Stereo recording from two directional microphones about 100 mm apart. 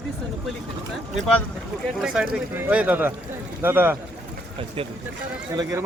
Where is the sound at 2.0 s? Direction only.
5° right (ahead or behind).